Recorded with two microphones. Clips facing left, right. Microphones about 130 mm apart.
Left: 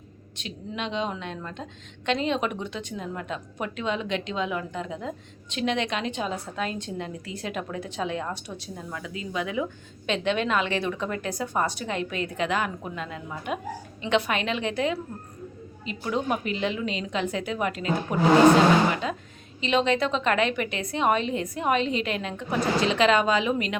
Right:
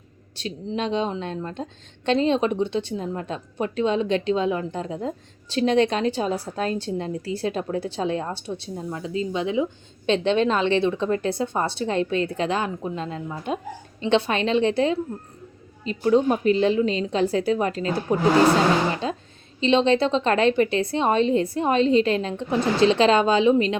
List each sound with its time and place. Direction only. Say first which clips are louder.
0.3 s a woman's voice: right 6 dB; 35° right (ahead or behind)
19.0 s a woman's voice: right 3 dB; 30° right (ahead or behind)